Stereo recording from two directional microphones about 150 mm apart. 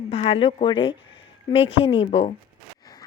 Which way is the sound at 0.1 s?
40° left (ahead or behind).